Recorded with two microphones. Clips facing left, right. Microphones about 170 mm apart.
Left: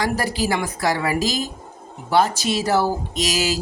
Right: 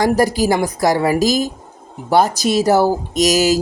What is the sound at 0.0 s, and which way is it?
A woman's voice, 40° right (ahead or behind).